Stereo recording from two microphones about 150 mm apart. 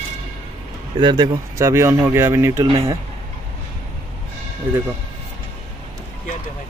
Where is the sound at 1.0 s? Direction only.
30° right (ahead or behind).